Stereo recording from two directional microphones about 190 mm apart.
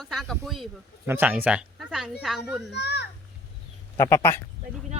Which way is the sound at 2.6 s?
60° left (ahead or behind).